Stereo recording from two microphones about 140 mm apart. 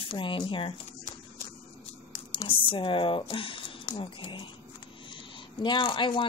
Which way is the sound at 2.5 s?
35° left (ahead or behind).